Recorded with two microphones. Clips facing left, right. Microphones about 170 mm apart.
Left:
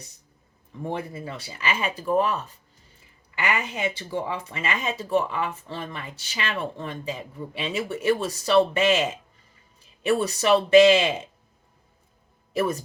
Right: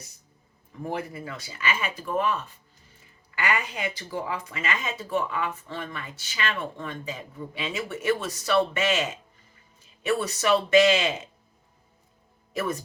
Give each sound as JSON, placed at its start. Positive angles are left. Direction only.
{"t": 0.9, "sound": "speech", "side_deg": 25}
{"t": 10.1, "sound": "speech", "side_deg": 35}
{"t": 12.5, "sound": "speech", "side_deg": 30}